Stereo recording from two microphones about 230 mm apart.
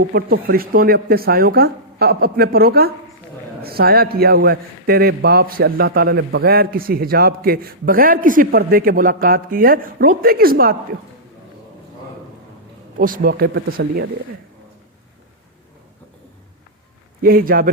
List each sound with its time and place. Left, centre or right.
0.1 s a man's voice: right
13.0 s a man's voice: right
17.2 s a man's voice: right